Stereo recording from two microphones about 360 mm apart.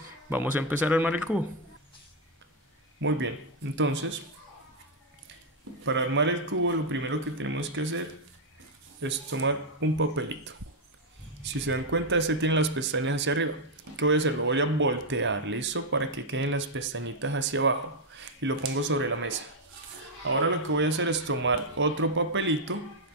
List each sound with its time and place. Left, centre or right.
0.3 s speech: centre
3.0 s a man's voice: right
5.9 s speech: right
9.0 s speech: right